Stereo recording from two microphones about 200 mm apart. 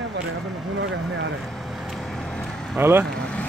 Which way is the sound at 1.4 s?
Centre (ahead or behind).